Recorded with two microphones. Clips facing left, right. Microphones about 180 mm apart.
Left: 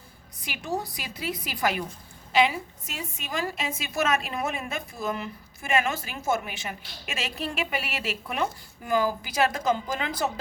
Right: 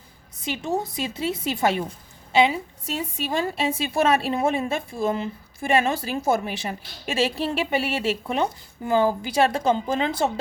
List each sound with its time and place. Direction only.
0.3 s a woman's voice: 25° right (ahead or behind)